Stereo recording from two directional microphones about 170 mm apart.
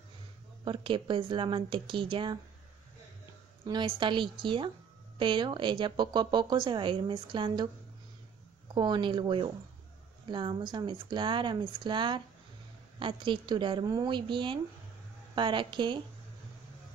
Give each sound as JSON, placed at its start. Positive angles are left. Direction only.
{"t": 0.7, "sound": "speech", "side_deg": -30}
{"t": 3.6, "sound": "speech", "side_deg": -30}
{"t": 8.7, "sound": "speech", "side_deg": -25}